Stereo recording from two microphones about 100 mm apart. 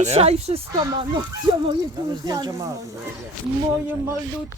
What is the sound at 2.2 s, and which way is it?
Speech, 40° right (ahead or behind).